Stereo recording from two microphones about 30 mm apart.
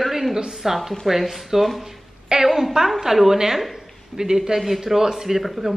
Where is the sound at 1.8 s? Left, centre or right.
Centre.